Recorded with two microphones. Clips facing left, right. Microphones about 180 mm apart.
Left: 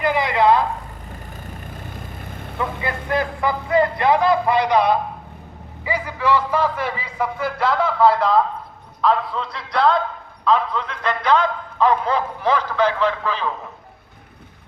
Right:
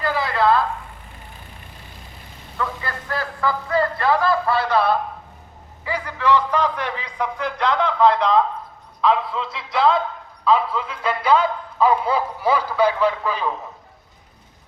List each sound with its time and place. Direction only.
0.0 s a sound: 20° left (ahead or behind)
1.5 s vehicle: 50° left (ahead or behind)
2.8 s a man's voice: 20° left (ahead or behind); by 13.5 s 10° right (ahead or behind)